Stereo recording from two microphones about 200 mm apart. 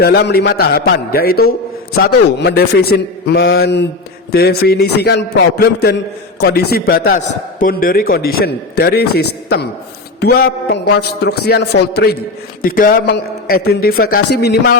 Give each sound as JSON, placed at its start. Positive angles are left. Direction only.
{"t": 0.0, "sound": "a man's voice", "side_deg": 50}
{"t": 12.6, "sound": "a man's voice", "side_deg": 45}